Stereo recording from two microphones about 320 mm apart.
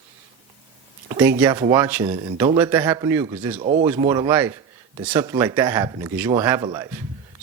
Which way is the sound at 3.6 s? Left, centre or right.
Right.